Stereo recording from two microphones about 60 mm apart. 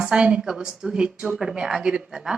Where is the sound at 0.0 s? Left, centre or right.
Centre.